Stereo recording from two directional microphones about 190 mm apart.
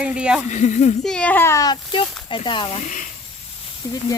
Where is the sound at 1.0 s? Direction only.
5° left (ahead or behind); by 3.1 s 40° left (ahead or behind).